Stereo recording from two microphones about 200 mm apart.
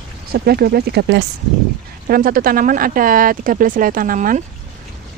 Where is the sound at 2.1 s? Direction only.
45° right (ahead or behind).